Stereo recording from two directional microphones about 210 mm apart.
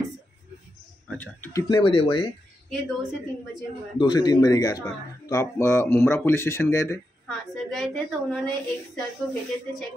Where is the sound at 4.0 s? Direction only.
20° left (ahead or behind).